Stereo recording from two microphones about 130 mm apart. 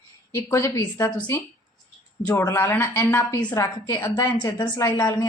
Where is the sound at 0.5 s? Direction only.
20° left (ahead or behind).